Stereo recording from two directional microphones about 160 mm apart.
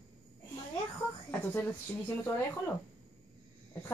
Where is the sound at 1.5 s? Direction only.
10° left (ahead or behind).